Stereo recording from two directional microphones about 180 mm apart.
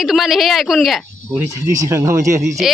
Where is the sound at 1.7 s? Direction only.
15° right (ahead or behind).